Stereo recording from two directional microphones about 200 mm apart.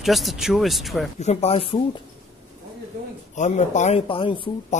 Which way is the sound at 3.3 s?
35° left (ahead or behind).